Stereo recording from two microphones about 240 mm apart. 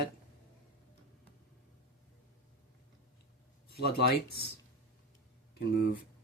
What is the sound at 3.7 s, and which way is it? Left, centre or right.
Speech, left.